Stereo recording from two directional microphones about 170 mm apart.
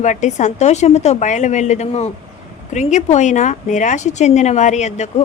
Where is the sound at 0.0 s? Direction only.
45° left (ahead or behind).